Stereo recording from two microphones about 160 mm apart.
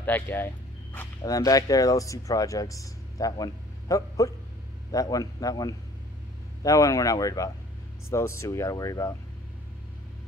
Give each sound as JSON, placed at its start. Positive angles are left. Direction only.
{"t": 0.0, "sound": "speech", "side_deg": 10}